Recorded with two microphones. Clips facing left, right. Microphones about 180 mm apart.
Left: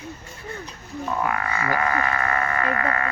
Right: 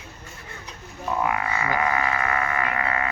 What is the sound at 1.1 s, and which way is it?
Frog, 15° right (ahead or behind).